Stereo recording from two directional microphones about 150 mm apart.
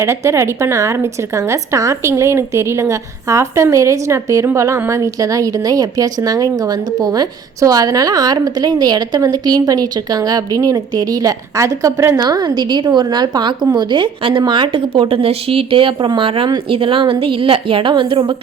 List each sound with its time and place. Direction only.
0.0 s a woman's voice: 20° right (ahead or behind)